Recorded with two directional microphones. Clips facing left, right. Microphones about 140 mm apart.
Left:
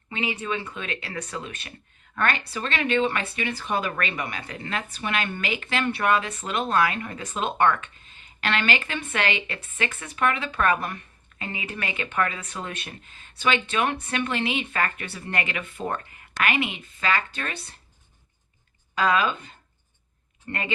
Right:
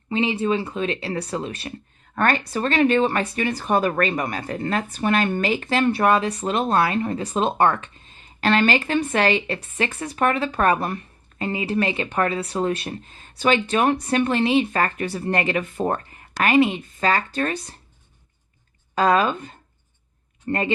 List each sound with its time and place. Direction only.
0.1 s speech: 30° right (ahead or behind)
18.9 s speech: 40° right (ahead or behind)